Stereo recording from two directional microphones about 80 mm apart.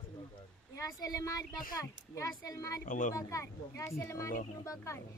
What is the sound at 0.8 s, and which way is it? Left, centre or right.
A woman's voice, left.